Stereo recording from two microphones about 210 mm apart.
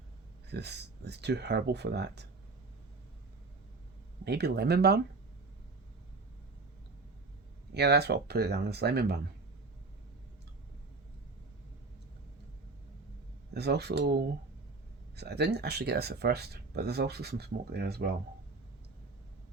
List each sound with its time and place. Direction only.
0.4 s speech: 50° right (ahead or behind)
4.2 s speech: 50° right (ahead or behind)
7.7 s speech: 50° right (ahead or behind)
13.5 s speech: 50° right (ahead or behind)